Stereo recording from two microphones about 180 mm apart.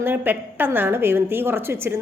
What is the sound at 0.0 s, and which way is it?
A woman's voice, 10° right (ahead or behind).